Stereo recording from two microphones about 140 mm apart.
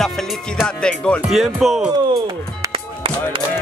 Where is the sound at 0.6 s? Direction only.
5° left (ahead or behind).